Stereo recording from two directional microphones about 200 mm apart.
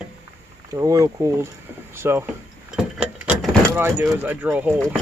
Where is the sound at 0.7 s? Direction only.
15° right (ahead or behind).